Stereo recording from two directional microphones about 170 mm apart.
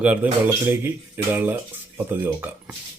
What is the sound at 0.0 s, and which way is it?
Speech, 10° right (ahead or behind).